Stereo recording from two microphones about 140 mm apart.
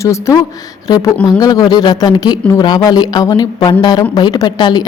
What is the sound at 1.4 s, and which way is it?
A woman's voice, 25° left (ahead or behind).